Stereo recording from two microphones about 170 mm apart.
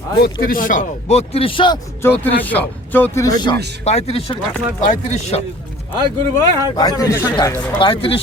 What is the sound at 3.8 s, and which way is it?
Speech, 40° left (ahead or behind).